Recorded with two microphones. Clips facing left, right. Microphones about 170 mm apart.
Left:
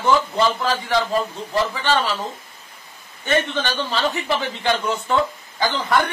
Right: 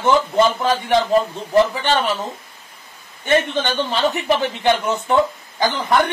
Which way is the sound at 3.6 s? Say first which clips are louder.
Right 3 dB; 20° right (ahead or behind).